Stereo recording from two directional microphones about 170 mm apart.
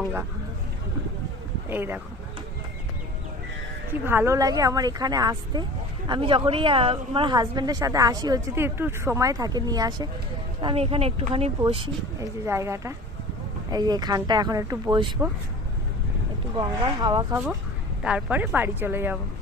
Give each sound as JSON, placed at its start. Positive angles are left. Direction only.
{"t": 1.7, "sound": "a woman's voice", "side_deg": -10}
{"t": 4.0, "sound": "a woman's voice", "side_deg": -15}
{"t": 10.6, "sound": "speech", "side_deg": -35}
{"t": 12.2, "sound": "a woman's voice", "side_deg": -15}
{"t": 16.5, "sound": "a woman's voice", "side_deg": -25}
{"t": 18.0, "sound": "a woman's voice", "side_deg": -10}